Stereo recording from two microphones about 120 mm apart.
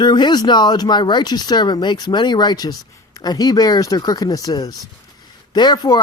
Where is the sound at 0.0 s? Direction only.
35° left (ahead or behind).